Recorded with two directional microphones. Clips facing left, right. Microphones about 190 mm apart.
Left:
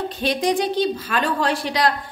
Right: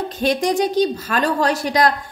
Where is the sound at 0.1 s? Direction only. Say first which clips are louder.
Right 3 dB; 45° right (ahead or behind).